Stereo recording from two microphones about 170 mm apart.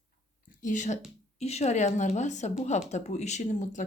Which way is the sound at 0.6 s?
45° left (ahead or behind).